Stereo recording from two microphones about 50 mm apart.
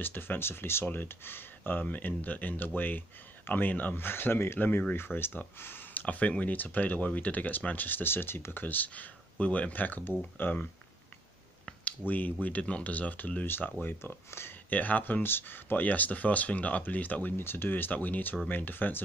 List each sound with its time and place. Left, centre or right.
0.0 s speech: left
4.6 s speech: left
8.6 s speech: left
12.1 s speech: left
14.3 s speech: left
14.7 s speech: left
17.4 s speech: left